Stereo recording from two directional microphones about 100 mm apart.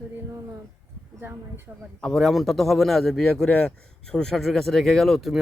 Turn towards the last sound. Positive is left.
turn(degrees=0)  # may be behind; listen again after turning